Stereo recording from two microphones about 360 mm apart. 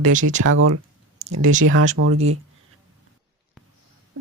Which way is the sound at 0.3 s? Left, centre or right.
Right.